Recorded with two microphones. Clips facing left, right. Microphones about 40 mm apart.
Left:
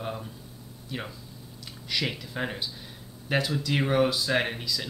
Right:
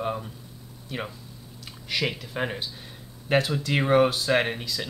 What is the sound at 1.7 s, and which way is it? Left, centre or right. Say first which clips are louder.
Speech: right 2 dB; centre.